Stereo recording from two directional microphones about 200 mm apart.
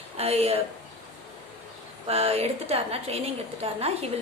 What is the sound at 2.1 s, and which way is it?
Speech, 30° right (ahead or behind).